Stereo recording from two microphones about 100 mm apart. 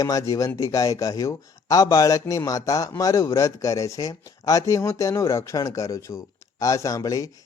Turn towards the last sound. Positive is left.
turn(degrees=35)  # may be behind; listen again after turning